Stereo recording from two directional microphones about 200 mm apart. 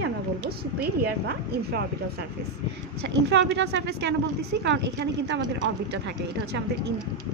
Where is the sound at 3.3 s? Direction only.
55° right (ahead or behind).